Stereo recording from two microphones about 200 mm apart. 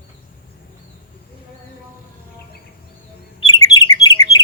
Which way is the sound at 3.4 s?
20° left (ahead or behind).